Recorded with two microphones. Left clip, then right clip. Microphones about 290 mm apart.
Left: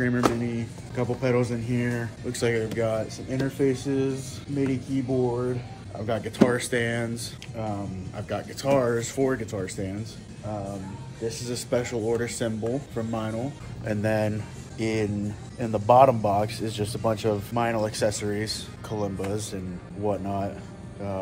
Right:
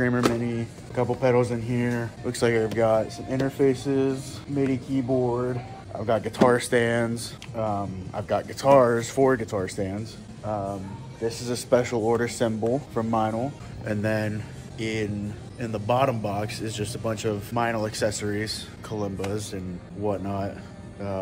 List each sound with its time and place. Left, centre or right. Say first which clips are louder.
0.4 s speech: right 1 dB; centre
11.2 s speech: right 4 dB; right
13.8 s speech: left 1 dB; centre
14.8 s speech: left 2 dB; centre
17.6 s speech: right 2 dB; centre